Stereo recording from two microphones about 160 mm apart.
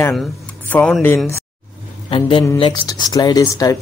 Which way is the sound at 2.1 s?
35° left (ahead or behind).